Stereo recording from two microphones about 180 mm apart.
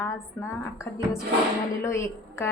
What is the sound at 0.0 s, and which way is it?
A woman's voice, 15° left (ahead or behind).